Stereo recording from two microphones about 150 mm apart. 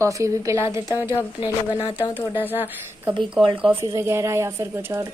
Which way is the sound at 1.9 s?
35° left (ahead or behind).